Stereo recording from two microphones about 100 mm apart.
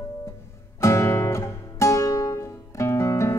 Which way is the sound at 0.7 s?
30° left (ahead or behind).